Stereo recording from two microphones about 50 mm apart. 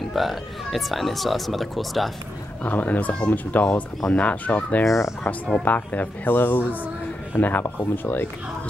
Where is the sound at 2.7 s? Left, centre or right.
Left.